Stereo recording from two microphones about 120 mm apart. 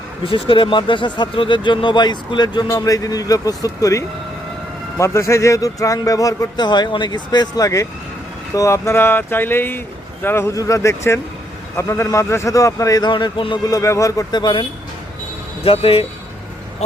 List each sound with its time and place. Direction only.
0.3 s speech: 45° left (ahead or behind)
13.7 s speech: 25° left (ahead or behind)
15.6 s speech: 50° left (ahead or behind)